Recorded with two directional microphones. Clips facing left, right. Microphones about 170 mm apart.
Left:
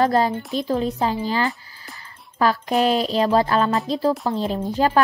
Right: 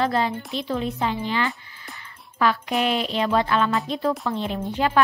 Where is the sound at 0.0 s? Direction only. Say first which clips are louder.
Left 4 dB; 40° left (ahead or behind).